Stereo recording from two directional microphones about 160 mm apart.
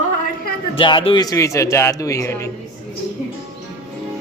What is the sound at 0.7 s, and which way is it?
Speech, 30° left (ahead or behind).